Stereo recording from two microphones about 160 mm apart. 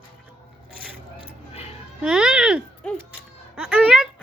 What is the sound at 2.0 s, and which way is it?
Speech, 5° right (ahead or behind).